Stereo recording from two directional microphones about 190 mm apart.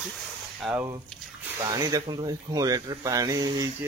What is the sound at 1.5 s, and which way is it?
Speech, 20° right (ahead or behind).